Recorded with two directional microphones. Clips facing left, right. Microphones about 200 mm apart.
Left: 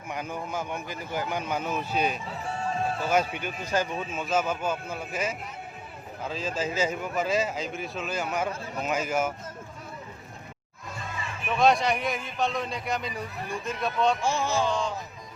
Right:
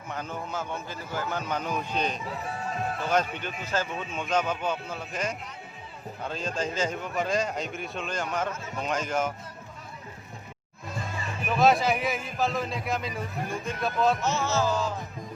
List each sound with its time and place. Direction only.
0.1 s a man's voice: 10° left (ahead or behind)
2.5 s speech: 30° left (ahead or behind)
3.1 s a man's voice: 10° left (ahead or behind)
11.4 s a man's voice: centre (ahead or behind)
14.2 s a man's voice: 15° left (ahead or behind)
14.6 s a man's voice: 5° right (ahead or behind)